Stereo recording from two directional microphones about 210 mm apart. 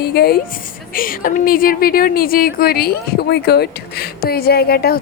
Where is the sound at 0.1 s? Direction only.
50° left (ahead or behind).